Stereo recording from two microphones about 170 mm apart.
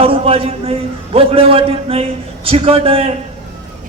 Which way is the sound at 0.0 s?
35° right (ahead or behind).